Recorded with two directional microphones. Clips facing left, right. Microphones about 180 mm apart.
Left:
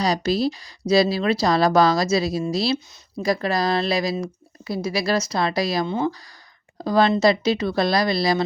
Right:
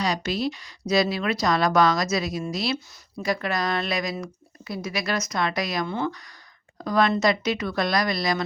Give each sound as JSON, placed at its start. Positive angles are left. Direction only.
{"t": 0.0, "sound": "speech", "side_deg": 35}